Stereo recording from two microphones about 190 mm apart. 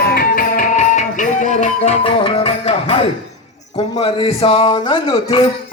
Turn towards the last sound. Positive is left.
turn(degrees=30)  # may be behind; listen again after turning